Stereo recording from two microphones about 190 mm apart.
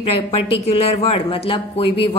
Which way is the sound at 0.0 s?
30° left (ahead or behind).